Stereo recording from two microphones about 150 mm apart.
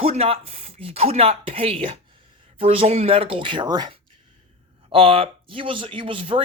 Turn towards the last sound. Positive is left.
turn(degrees=-35)  # may be behind; listen again after turning